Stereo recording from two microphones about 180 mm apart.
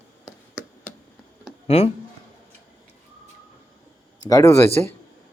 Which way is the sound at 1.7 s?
35° left (ahead or behind).